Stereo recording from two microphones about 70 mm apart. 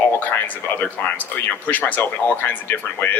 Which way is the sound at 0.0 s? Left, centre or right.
Left.